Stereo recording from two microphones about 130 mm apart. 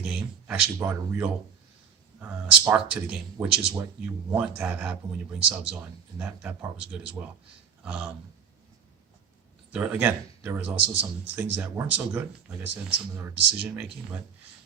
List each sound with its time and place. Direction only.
0.0 s a sound: 5° right (ahead or behind)
0.8 s speech: 20° right (ahead or behind)
9.7 s speech: 10° right (ahead or behind)